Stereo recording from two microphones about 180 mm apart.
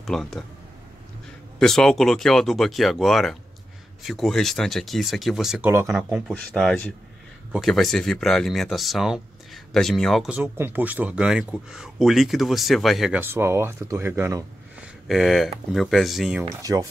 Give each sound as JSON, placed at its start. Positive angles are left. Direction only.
{"t": 0.0, "sound": "speech", "side_deg": 0}
{"t": 1.6, "sound": "speech", "side_deg": 5}
{"t": 15.0, "sound": "speech", "side_deg": 0}
{"t": 16.4, "sound": "speech", "side_deg": -20}